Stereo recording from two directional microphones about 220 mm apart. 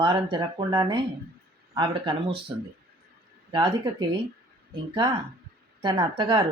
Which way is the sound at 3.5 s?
20° right (ahead or behind).